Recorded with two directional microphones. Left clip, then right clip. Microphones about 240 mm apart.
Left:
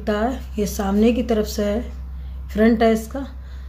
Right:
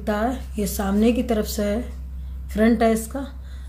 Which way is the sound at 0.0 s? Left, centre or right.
Centre.